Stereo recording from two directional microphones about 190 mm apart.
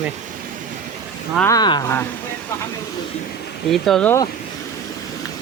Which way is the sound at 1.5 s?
20° left (ahead or behind).